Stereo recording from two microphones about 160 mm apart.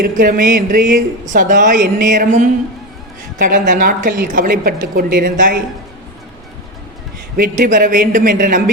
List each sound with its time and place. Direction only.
0.0 s a woman's voice: 65° right (ahead or behind)
7.3 s a woman's voice: 60° right (ahead or behind)